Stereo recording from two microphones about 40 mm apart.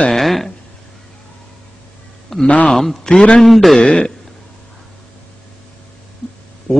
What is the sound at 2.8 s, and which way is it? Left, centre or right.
Speech, centre.